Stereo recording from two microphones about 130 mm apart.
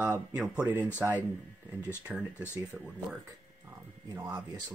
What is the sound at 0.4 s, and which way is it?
Speech, 15° right (ahead or behind).